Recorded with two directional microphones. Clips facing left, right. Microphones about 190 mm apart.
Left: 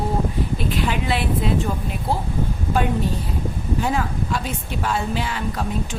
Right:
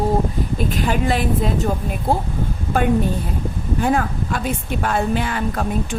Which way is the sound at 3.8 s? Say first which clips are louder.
Right 5 dB; 55° right (ahead or behind).